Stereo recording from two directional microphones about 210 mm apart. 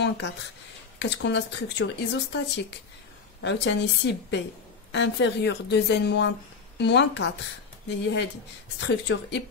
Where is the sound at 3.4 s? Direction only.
60° left (ahead or behind).